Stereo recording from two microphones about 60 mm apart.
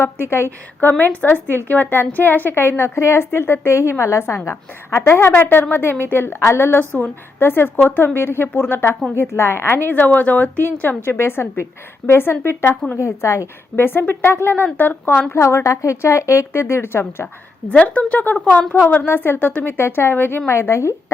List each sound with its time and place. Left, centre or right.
0.3 s a woman's voice: left
0.9 s a woman's voice: left
6.7 s a woman's voice: left
13.0 s a woman's voice: left
14.1 s a woman's voice: left
15.4 s a woman's voice: left
17.7 s a woman's voice: left
18.3 s a woman's voice: left